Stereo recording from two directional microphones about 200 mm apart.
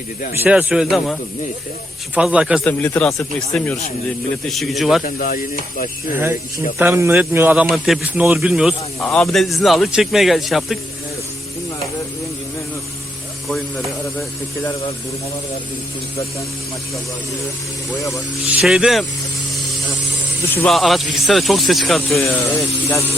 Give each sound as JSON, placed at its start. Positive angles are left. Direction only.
{"t": 0.4, "sound": "speech", "side_deg": -5}
{"t": 2.1, "sound": "speech", "side_deg": -5}
{"t": 2.6, "sound": "speech", "side_deg": 10}
{"t": 5.0, "sound": "speech", "side_deg": 45}
{"t": 6.7, "sound": "speech", "side_deg": -10}
{"t": 9.0, "sound": "speech", "side_deg": 10}
{"t": 9.2, "sound": "speech", "side_deg": 0}
{"t": 13.5, "sound": "speech", "side_deg": 0}
{"t": 18.6, "sound": "speech", "side_deg": 0}
{"t": 20.7, "sound": "speech", "side_deg": 0}